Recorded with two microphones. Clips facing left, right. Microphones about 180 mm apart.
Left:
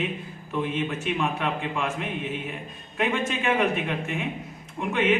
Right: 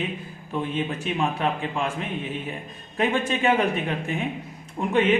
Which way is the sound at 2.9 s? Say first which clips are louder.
Right 3 dB; 35° right (ahead or behind).